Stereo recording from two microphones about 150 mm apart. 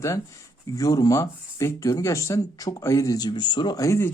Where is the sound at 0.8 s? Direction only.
25° left (ahead or behind).